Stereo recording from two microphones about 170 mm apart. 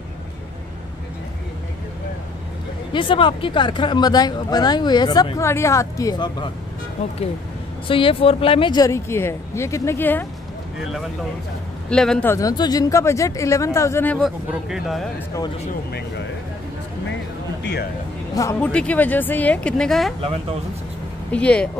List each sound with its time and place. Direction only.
2.9 s speech: 30° left (ahead or behind)
7.9 s speech: 30° left (ahead or behind); by 10.2 s 10° left (ahead or behind)
10.8 s speech: centre (ahead or behind)
12.4 s speech: 20° left (ahead or behind)
14.2 s speech: centre (ahead or behind)
18.3 s speech: 20° left (ahead or behind)
18.6 s speech: 5° left (ahead or behind)
20.2 s speech: 35° right (ahead or behind)
21.3 s speech: 5° left (ahead or behind)